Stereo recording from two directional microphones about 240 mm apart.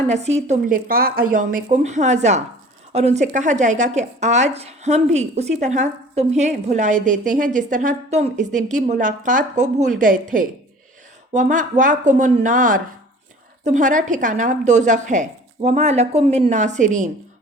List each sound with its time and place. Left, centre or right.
0.1 s speech: right